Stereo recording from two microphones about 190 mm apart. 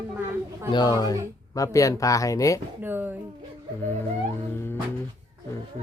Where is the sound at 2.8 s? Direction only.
10° right (ahead or behind).